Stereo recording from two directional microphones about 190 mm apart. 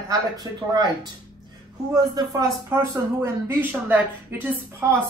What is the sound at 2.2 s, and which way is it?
A man's voice, 20° right (ahead or behind).